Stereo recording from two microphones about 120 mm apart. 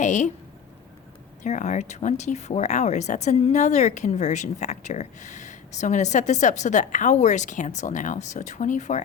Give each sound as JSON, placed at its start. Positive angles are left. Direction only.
{"t": 0.0, "sound": "a woman's voice", "side_deg": 90}
{"t": 1.5, "sound": "speech", "side_deg": 85}